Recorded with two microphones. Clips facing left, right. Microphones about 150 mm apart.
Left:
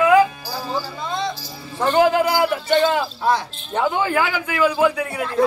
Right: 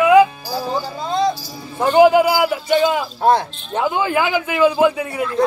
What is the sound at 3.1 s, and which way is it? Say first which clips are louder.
Speech: right 5 dB; 50° right (ahead or behind).